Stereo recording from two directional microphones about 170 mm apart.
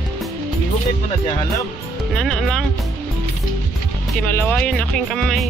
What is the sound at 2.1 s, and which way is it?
Speech, 5° left (ahead or behind).